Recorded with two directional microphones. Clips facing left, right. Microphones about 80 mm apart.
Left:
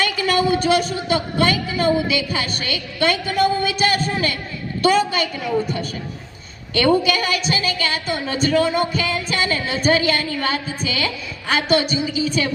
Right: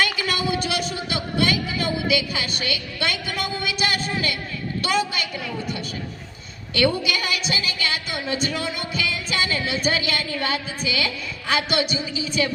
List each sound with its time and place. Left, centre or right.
0.0 s a man's voice: left